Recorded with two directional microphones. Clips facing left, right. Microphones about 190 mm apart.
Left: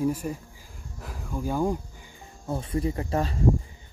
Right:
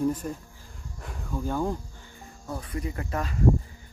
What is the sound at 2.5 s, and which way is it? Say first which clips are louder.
Speech: left 6 dB; 25° left (ahead or behind).